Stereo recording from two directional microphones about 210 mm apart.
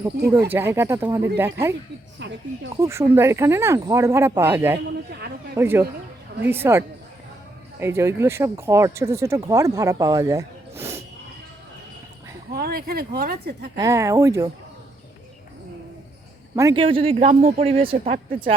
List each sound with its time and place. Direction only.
0.3 s speech: 10° right (ahead or behind)
2.7 s speech: 15° right (ahead or behind)
12.5 s speech: 45° right (ahead or behind)
13.7 s speech: 15° right (ahead or behind)
16.6 s speech: 20° right (ahead or behind)
18.0 s speech: 40° right (ahead or behind)